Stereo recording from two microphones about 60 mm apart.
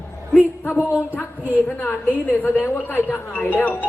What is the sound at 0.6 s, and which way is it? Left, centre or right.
Music, left.